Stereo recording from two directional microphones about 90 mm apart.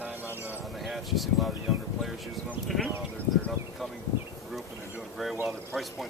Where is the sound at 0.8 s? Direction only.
Centre (ahead or behind).